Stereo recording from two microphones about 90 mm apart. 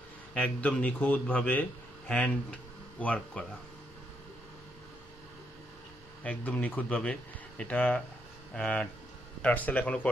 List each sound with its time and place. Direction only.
0.3 s a man's voice: 15° left (ahead or behind)
6.2 s speech: 15° left (ahead or behind)